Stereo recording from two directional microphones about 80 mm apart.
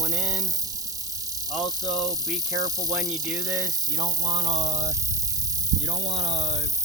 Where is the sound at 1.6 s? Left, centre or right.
Right.